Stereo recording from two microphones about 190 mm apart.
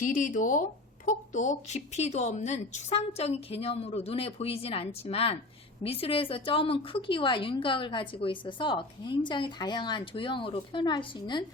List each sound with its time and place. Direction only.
0.0 s a woman's voice: 40° left (ahead or behind); by 11.4 s 25° left (ahead or behind)